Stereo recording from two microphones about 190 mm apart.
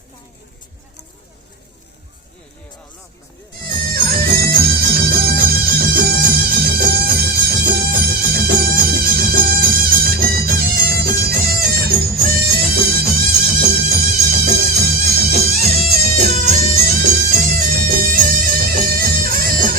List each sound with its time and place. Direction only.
3.9 s music: 55° right (ahead or behind)